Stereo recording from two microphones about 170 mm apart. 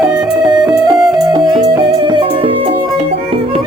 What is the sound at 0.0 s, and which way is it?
Music, 5° right (ahead or behind).